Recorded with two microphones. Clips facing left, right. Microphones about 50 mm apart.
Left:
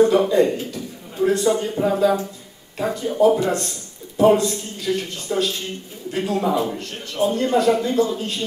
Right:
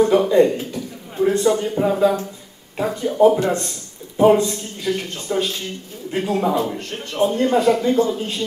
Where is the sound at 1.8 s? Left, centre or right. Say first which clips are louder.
Right 2 dB; right.